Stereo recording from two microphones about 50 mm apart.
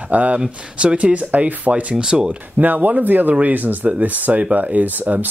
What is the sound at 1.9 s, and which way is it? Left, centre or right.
Speech, centre.